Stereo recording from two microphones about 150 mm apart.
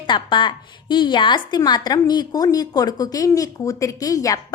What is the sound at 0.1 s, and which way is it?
A woman's voice, 30° left (ahead or behind).